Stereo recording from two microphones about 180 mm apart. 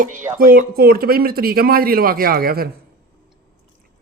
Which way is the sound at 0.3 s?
55° right (ahead or behind).